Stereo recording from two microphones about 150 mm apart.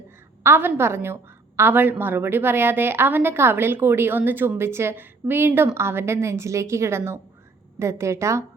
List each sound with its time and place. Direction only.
0.4 s a woman's voice: 15° right (ahead or behind)